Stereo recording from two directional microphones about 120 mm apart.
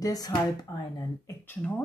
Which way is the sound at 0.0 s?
30° left (ahead or behind).